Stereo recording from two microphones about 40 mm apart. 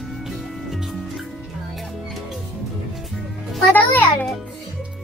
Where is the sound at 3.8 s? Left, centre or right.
Left.